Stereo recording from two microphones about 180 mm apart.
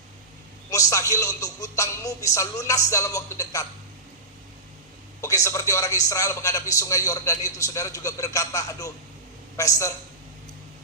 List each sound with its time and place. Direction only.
0.7 s speech: 20° left (ahead or behind)
5.2 s a woman's voice: 15° left (ahead or behind)